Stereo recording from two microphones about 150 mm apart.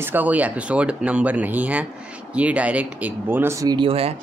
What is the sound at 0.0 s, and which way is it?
Speech, 10° right (ahead or behind).